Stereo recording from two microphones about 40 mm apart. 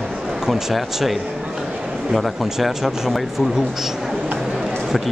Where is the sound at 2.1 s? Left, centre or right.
Centre.